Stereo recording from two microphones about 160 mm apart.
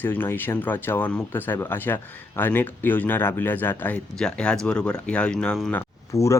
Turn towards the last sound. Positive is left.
turn(degrees=20)  # may be behind; listen again after turning